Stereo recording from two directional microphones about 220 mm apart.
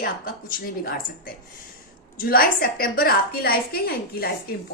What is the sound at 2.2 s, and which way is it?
A woman's voice, 40° left (ahead or behind).